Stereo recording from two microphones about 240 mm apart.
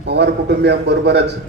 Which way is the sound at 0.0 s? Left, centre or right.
Right.